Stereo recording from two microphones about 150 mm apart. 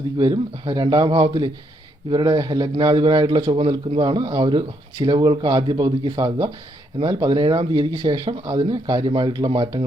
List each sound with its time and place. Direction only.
0.2 s a man's voice: 25° right (ahead or behind)